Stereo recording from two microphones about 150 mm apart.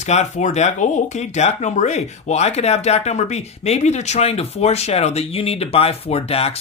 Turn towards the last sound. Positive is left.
turn(degrees=40)  # may be behind; listen again after turning